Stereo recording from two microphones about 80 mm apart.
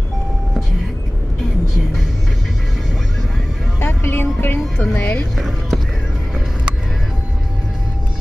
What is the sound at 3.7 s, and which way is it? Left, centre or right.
Music, left.